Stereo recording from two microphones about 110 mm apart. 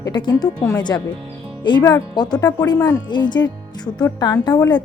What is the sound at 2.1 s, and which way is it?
Speech, 40° left (ahead or behind).